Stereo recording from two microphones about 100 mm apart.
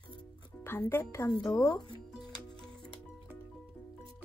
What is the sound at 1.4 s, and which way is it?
Speech, 40° left (ahead or behind).